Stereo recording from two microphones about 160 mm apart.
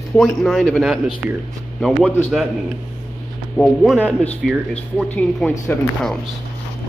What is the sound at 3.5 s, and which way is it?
Speech, centre (ahead or behind).